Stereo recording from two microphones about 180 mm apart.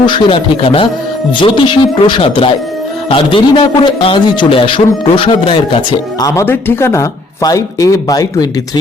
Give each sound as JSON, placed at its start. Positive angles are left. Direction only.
{"t": 0.0, "sound": "a man's voice", "side_deg": 25}
{"t": 6.2, "sound": "speech", "side_deg": 15}